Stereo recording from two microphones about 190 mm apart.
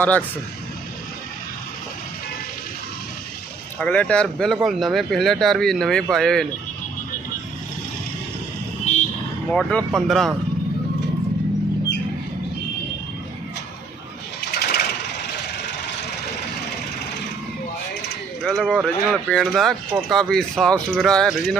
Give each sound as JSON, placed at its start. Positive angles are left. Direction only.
{"t": 0.0, "sound": "speech", "side_deg": 10}
{"t": 3.8, "sound": "speech", "side_deg": 5}
{"t": 8.9, "sound": "vehicle", "side_deg": 40}
{"t": 9.5, "sound": "speech", "side_deg": 5}
{"t": 14.4, "sound": "sewing machine", "side_deg": 55}
{"t": 18.4, "sound": "speech", "side_deg": 0}